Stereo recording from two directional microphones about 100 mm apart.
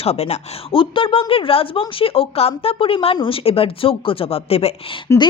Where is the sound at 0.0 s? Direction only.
90° left.